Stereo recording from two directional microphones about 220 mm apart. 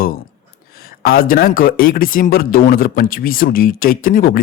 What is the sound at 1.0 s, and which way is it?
Speech, 40° left (ahead or behind).